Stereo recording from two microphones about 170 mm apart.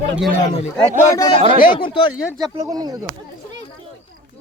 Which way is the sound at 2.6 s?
20° right (ahead or behind).